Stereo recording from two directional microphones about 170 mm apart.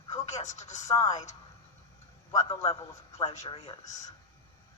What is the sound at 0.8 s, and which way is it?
Speech, 20° left (ahead or behind).